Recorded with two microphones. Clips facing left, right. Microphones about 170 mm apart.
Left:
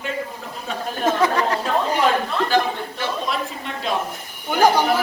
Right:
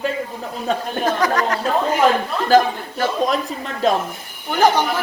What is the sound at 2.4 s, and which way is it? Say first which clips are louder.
A man's voice: right 10 dB; 45° right (ahead or behind).